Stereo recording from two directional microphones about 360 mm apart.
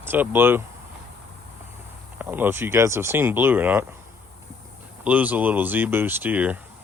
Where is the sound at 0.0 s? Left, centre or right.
Centre.